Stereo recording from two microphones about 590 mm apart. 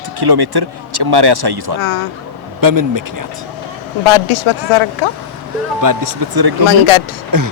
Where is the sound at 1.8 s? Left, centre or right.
Left.